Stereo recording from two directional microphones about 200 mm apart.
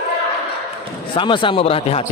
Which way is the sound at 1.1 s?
25° left (ahead or behind).